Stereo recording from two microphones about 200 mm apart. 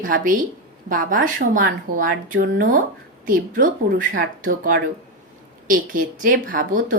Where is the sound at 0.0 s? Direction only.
40° right (ahead or behind).